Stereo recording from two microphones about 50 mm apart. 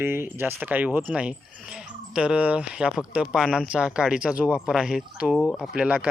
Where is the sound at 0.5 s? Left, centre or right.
Right.